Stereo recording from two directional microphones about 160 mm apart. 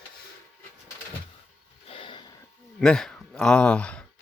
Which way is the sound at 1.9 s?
35° left (ahead or behind).